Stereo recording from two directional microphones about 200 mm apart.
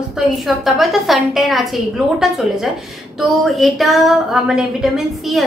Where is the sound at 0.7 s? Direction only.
Centre (ahead or behind).